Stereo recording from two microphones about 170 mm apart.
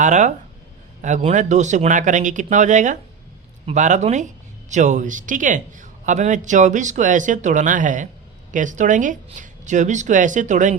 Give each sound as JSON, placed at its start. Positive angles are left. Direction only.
{"t": 0.0, "sound": "a man's voice", "side_deg": -45}